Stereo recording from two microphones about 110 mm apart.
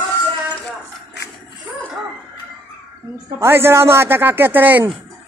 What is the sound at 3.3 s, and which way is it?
Speech, 20° right (ahead or behind).